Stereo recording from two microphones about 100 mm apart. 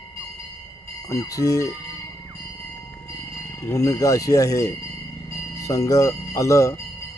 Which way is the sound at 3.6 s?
30° left (ahead or behind).